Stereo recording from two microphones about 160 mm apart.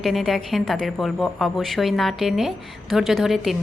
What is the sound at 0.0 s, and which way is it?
A woman's voice, centre (ahead or behind).